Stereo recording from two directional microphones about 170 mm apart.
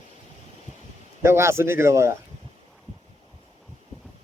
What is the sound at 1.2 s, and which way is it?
Speech, 15° right (ahead or behind).